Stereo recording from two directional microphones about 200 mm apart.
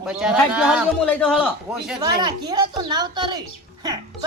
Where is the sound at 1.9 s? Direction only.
20° right (ahead or behind).